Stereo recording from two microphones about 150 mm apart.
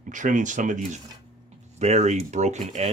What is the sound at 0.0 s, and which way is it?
Speech, 60° right (ahead or behind).